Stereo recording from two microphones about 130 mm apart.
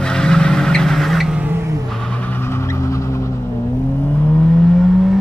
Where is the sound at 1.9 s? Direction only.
5° left (ahead or behind); by 3.4 s 25° left (ahead or behind).